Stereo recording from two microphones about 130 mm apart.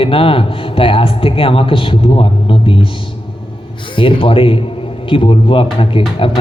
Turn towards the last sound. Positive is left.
turn(degrees=40)  # may be behind; listen again after turning